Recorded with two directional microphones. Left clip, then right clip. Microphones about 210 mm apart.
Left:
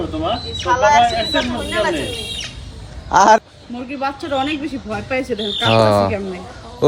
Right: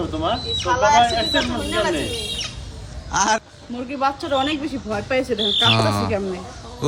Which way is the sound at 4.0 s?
15° right (ahead or behind).